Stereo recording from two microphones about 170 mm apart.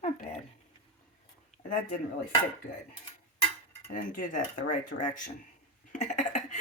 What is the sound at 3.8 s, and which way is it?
Speech, 50° left (ahead or behind).